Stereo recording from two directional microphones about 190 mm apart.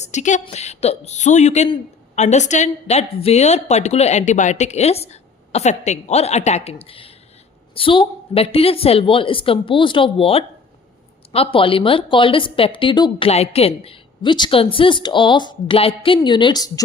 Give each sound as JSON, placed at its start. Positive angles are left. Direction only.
{"t": 0.0, "sound": "a woman's voice", "side_deg": 40}